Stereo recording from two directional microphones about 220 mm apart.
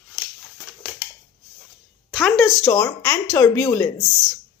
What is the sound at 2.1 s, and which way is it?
Speech, centre (ahead or behind).